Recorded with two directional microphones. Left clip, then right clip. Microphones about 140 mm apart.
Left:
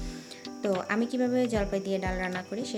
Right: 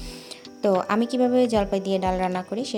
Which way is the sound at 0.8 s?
50° right (ahead or behind).